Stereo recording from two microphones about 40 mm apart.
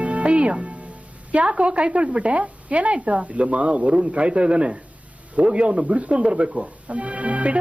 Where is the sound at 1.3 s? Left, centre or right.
Right.